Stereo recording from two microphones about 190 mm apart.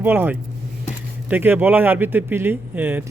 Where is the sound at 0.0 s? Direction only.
10° right (ahead or behind).